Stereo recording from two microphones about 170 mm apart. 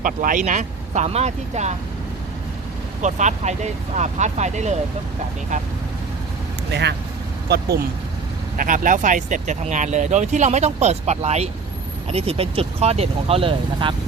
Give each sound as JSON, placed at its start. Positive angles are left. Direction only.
{"t": 0.0, "sound": "speech", "side_deg": -50}
{"t": 3.0, "sound": "speech", "side_deg": -45}
{"t": 6.7, "sound": "speech", "side_deg": -85}
{"t": 7.4, "sound": "speech", "side_deg": -75}
{"t": 8.5, "sound": "speech", "side_deg": -50}